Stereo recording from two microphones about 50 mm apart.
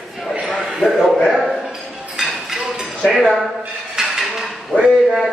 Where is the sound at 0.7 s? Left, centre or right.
Centre.